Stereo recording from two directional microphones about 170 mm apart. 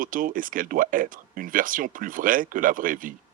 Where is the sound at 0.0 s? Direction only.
55° right (ahead or behind).